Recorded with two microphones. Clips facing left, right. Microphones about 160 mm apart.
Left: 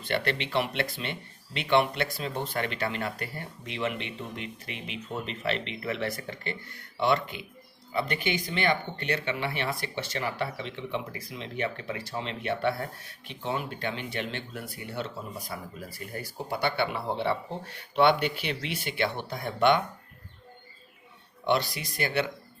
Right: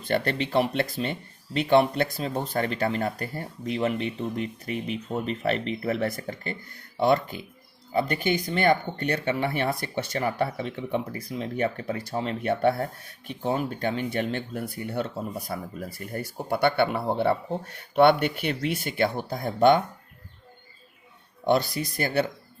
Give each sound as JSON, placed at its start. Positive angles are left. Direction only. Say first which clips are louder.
{"t": 0.1, "sound": "speech", "louder": "right 4 dB", "side_deg": -40}
{"t": 21.4, "sound": "speech", "louder": "right 4 dB", "side_deg": -45}